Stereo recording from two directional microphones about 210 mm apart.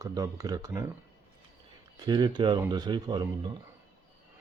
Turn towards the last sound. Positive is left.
turn(degrees=-20)  # may be behind; listen again after turning